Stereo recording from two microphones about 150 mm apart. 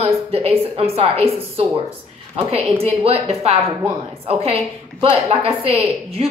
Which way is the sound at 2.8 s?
40° right (ahead or behind).